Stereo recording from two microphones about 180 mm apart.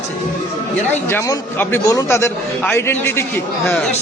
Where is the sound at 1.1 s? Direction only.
10° left (ahead or behind).